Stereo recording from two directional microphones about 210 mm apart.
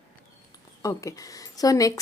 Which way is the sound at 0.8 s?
15° left (ahead or behind).